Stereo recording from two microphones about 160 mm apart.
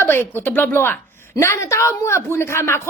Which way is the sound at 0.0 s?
15° left (ahead or behind).